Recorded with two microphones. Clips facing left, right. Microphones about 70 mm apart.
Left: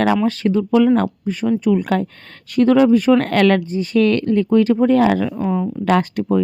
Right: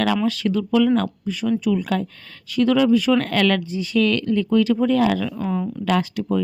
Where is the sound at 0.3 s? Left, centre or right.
Left.